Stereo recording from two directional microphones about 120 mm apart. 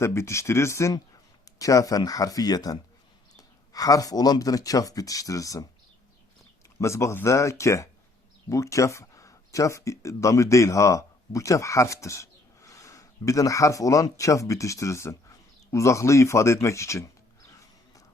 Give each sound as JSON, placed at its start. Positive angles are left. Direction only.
{"t": 0.0, "sound": "speech", "side_deg": 25}
{"t": 6.7, "sound": "speech", "side_deg": 25}